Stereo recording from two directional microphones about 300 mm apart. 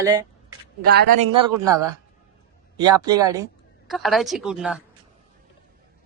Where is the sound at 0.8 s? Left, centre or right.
Right.